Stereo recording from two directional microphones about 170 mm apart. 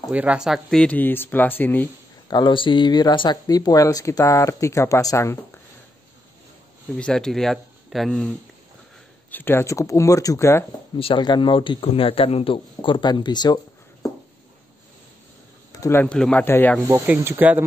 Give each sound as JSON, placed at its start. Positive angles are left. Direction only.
{"t": 0.1, "sound": "speech", "side_deg": -10}
{"t": 2.2, "sound": "speech", "side_deg": 25}
{"t": 7.0, "sound": "speech", "side_deg": 5}
{"t": 11.0, "sound": "speech", "side_deg": 30}
{"t": 15.7, "sound": "speech", "side_deg": 15}
{"t": 16.8, "sound": "speech", "side_deg": -15}